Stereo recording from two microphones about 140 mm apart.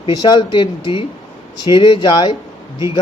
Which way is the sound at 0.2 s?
35° left (ahead or behind).